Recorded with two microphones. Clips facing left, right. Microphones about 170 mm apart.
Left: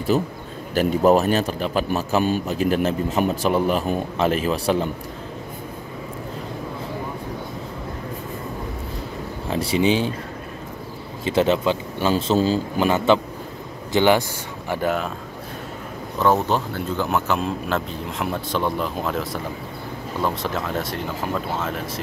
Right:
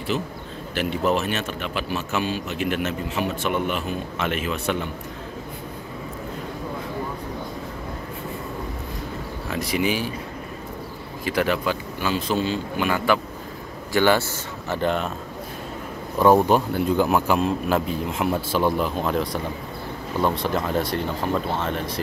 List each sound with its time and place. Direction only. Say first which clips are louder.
0.1 s a man's voice: left 5 dB; 35° left (ahead or behind)
9.5 s speech: left 4 dB; 30° left (ahead or behind)
11.2 s a man's voice: left 4 dB; 25° left (ahead or behind)
12.9 s speech: left 4 dB; 25° left (ahead or behind)
14.7 s speech: left 1 dB; 5° left (ahead or behind)
16.2 s speech: right 3 dB; 15° right (ahead or behind); by 22.0 s 5° left (ahead or behind)